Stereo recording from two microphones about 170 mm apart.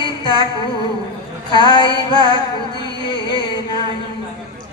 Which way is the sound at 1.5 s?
25° left (ahead or behind).